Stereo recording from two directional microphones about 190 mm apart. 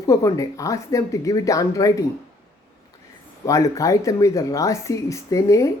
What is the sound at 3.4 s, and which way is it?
Speech, 15° left (ahead or behind).